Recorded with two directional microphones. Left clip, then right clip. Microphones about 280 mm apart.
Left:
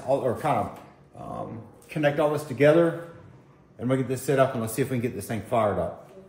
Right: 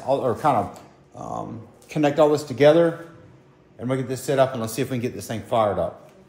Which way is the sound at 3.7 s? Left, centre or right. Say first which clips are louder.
Even; centre.